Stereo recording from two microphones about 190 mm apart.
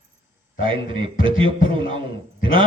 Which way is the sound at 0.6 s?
25° right (ahead or behind).